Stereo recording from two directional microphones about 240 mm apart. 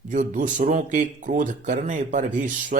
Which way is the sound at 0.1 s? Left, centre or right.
Right.